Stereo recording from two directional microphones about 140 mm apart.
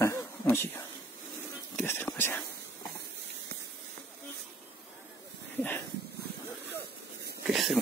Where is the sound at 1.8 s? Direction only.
15° left (ahead or behind).